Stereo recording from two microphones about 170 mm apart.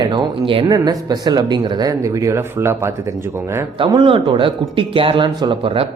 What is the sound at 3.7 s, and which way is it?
Speech, 30° right (ahead or behind).